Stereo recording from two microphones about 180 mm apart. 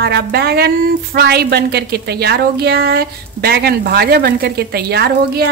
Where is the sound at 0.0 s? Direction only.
65° right (ahead or behind).